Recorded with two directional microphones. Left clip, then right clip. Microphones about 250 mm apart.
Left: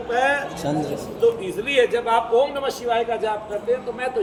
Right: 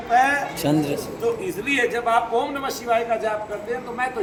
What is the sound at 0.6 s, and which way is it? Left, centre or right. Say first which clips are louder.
Speech: right 3 dB; right.